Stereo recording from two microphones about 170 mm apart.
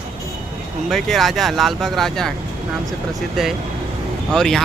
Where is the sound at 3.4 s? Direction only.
5° right (ahead or behind).